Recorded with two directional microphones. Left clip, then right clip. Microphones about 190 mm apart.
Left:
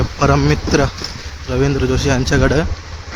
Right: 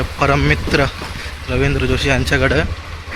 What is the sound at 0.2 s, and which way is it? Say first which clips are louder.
Speech: even; 25° left (ahead or behind).